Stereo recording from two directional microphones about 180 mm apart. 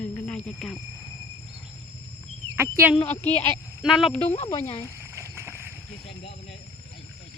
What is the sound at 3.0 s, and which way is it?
Speech, 10° left (ahead or behind).